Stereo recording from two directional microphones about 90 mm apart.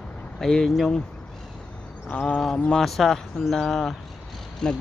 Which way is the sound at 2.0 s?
15° left (ahead or behind).